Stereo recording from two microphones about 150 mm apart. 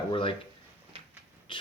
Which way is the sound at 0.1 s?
35° left (ahead or behind).